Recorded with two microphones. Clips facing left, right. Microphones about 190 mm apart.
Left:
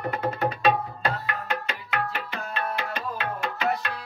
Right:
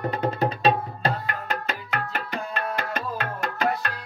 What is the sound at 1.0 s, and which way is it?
Music, 40° right (ahead or behind).